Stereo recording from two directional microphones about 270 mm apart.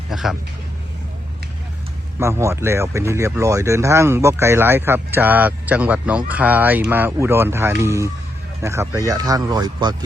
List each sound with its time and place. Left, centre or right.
0.1 s speech: centre
2.1 s speech: centre